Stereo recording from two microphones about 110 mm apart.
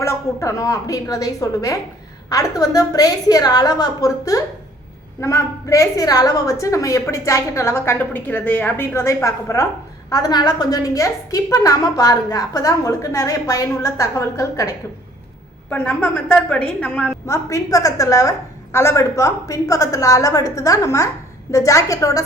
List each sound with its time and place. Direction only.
0.0 s a woman's voice: 25° left (ahead or behind)
16.0 s a woman's voice: 20° left (ahead or behind)
17.2 s a woman's voice: 30° left (ahead or behind)